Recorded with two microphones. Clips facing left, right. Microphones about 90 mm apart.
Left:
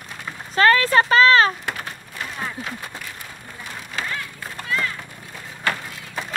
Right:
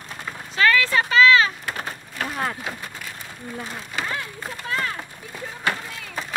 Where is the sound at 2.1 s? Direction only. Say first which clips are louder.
Right 4 dB; 55° right (ahead or behind).